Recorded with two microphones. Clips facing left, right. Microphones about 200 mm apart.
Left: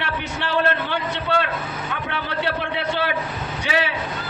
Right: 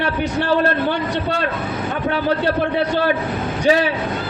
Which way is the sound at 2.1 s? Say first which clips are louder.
Right 8 dB; 40° right (ahead or behind).